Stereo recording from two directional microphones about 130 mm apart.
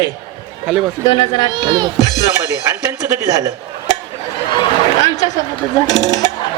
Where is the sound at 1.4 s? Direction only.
35° right (ahead or behind).